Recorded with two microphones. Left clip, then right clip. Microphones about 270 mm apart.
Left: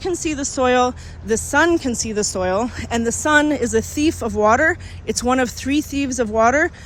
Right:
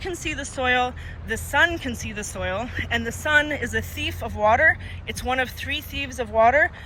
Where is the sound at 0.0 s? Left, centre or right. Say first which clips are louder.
Left 6 dB; centre.